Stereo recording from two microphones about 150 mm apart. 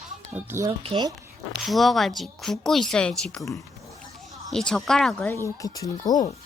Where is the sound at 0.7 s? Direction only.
35° right (ahead or behind).